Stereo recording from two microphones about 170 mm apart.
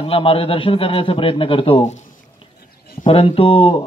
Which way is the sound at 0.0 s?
30° left (ahead or behind).